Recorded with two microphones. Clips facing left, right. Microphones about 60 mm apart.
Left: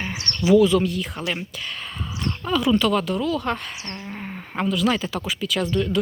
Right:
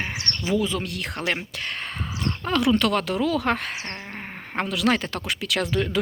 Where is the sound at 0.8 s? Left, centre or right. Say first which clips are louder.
Left 5 dB; right.